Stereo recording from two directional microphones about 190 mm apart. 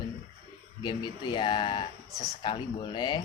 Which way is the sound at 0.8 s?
25° left (ahead or behind).